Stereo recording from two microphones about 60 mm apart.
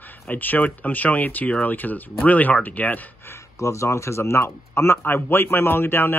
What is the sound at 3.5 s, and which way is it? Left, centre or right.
Speech, left.